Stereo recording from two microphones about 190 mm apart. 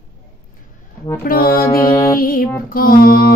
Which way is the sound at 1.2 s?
50° left (ahead or behind).